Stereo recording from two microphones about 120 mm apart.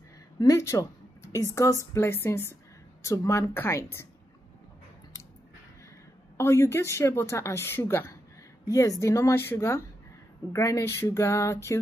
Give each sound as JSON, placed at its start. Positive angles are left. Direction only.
{"t": 0.4, "sound": "a woman's voice", "side_deg": 25}
{"t": 6.3, "sound": "a woman's voice", "side_deg": 25}
{"t": 8.6, "sound": "a woman's voice", "side_deg": 30}